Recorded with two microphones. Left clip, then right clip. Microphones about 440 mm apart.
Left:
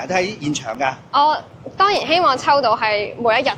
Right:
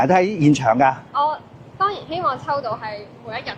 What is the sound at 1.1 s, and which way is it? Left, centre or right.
A woman's voice, left.